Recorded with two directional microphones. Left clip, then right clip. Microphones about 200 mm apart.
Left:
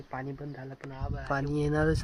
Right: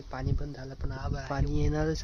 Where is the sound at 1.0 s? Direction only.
40° right (ahead or behind).